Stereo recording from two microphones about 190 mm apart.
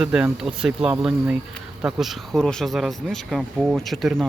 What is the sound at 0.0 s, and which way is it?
Speech, 5° right (ahead or behind).